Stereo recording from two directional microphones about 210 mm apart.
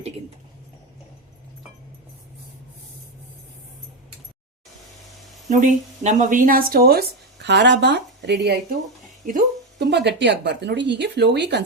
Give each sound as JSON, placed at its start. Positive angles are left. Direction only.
{"t": 5.5, "sound": "a woman's voice", "side_deg": -35}